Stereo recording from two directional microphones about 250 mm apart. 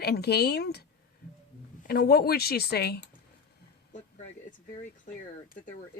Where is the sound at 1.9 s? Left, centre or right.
Left.